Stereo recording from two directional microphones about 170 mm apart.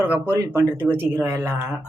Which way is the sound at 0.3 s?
15° right (ahead or behind).